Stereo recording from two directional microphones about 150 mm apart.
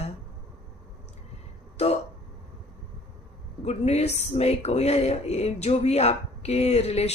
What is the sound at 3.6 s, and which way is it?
Speech, 45° left (ahead or behind).